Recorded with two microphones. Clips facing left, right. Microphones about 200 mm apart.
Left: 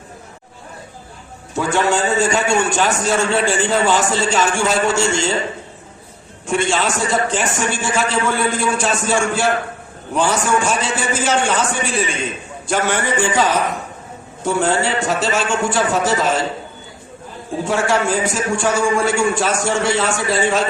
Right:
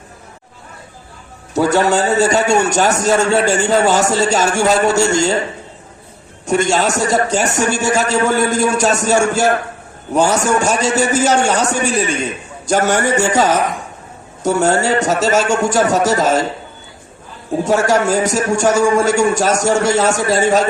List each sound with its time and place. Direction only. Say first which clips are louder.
1.5 s a man's voice: right 4 dB; 40° right (ahead or behind)
6.4 s a man's voice: right 4 dB; 40° right (ahead or behind)
17.5 s a man's voice: right 4 dB; 40° right (ahead or behind)